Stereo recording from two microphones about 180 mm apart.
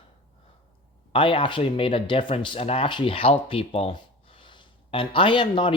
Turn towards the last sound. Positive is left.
turn(degrees=25)  # may be behind; listen again after turning